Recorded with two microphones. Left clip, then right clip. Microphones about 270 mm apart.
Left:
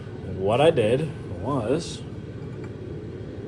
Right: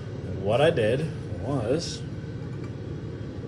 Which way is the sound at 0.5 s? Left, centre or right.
Centre.